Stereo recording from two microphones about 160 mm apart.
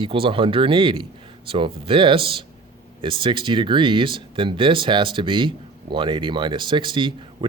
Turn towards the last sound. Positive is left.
turn(degrees=-30)  # may be behind; listen again after turning